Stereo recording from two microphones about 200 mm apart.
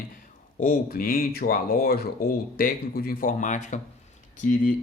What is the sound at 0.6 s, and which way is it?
Speech, 45° left (ahead or behind).